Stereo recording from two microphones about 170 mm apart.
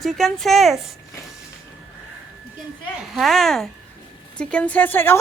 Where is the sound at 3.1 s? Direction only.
Centre (ahead or behind).